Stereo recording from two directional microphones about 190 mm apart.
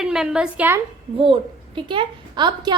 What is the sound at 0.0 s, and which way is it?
Speech, 5° right (ahead or behind).